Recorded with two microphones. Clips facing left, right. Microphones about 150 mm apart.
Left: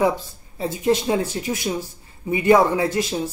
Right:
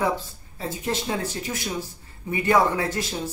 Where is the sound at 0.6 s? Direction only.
15° left (ahead or behind).